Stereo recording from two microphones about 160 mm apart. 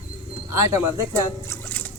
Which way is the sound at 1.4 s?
15° left (ahead or behind).